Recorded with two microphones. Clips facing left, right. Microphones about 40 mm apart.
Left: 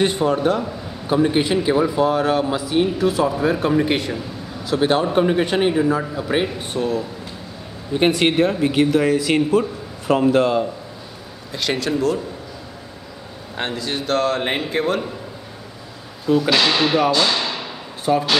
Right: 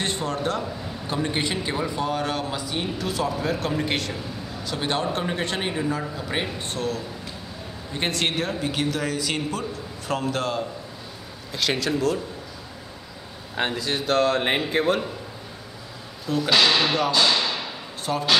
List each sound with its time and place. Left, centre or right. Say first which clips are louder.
0.0 s a man's voice: left 8 dB; centre
11.5 s a man's voice: left 3 dB; centre
13.6 s a man's voice: left 1 dB; centre
16.3 s speech: left 3 dB; centre